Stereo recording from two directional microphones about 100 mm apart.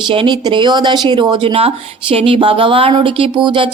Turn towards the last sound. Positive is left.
turn(degrees=-50)  # may be behind; listen again after turning